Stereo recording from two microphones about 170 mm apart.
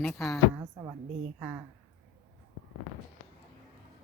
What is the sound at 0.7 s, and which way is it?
Speech, 15° right (ahead or behind).